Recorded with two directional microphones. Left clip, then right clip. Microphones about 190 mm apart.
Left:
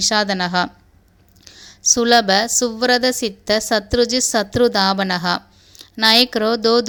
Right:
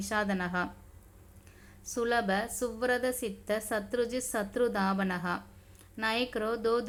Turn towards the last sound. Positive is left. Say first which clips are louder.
# left 14 dB
turn(degrees=35)  # may be behind; listen again after turning